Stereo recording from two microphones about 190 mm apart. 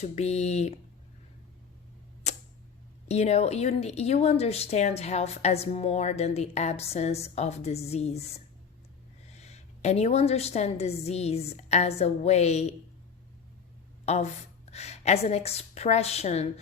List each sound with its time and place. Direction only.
0.0 s speech: 35° left (ahead or behind)
2.3 s tick-tock: 35° left (ahead or behind)
3.1 s speech: 35° left (ahead or behind)
9.4 s speech: 35° left (ahead or behind)
14.0 s a woman's voice: 35° left (ahead or behind)